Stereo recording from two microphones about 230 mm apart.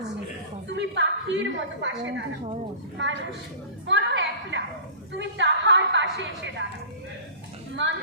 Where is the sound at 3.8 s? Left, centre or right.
Right.